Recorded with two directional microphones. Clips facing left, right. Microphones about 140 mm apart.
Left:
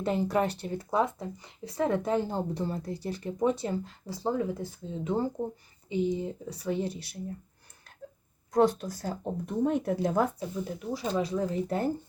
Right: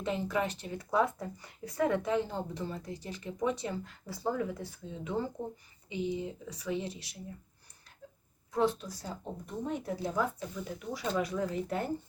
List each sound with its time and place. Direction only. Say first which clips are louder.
0.0 s speech: left 5 dB; 40° left (ahead or behind)
0.9 s speech: left 1 dB; 25° left (ahead or behind)
8.5 s speech: left 6 dB; 50° left (ahead or behind)
9.6 s speech: left 7 dB; 65° left (ahead or behind)
10.4 s speech: left 5 dB; 30° left (ahead or behind)